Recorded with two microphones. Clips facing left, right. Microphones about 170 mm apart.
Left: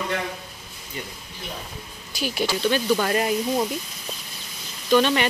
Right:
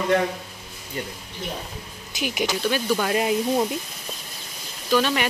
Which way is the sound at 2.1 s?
20° right (ahead or behind).